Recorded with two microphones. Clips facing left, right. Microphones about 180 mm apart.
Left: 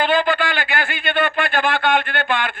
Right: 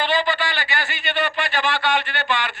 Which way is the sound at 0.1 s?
50° left (ahead or behind).